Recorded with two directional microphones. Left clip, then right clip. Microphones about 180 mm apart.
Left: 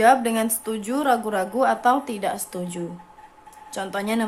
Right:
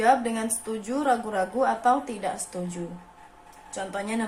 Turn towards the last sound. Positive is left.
turn(degrees=40)  # may be behind; listen again after turning